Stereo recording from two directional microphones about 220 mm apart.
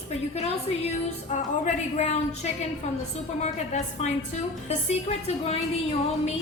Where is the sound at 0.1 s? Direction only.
30° left (ahead or behind).